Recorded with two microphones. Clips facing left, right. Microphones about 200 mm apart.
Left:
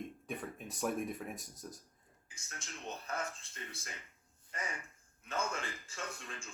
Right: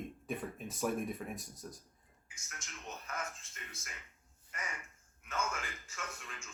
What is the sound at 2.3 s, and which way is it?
A man's voice, 30° left (ahead or behind).